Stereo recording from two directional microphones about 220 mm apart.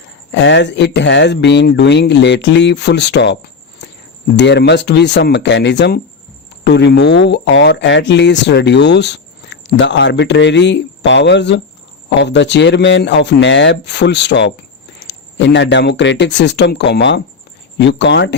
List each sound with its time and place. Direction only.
0.3 s speech: 55° left (ahead or behind)